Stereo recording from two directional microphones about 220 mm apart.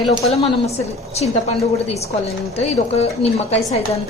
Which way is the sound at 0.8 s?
30° left (ahead or behind).